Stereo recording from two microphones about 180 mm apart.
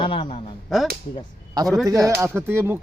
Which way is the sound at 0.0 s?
30° left (ahead or behind).